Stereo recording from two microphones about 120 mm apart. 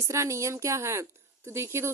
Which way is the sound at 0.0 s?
25° right (ahead or behind).